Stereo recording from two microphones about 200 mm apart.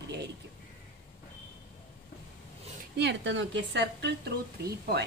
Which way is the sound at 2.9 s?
60° right (ahead or behind).